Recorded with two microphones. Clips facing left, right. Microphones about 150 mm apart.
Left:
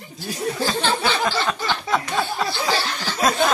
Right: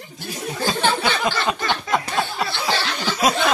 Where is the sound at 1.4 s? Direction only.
15° right (ahead or behind).